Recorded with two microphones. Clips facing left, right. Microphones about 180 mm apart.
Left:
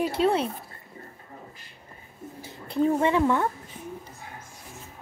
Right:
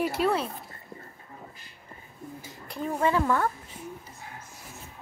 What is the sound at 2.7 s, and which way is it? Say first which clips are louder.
Speech: left 5 dB; 25° left (ahead or behind).